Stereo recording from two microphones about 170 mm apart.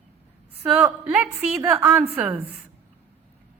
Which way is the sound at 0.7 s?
10° right (ahead or behind).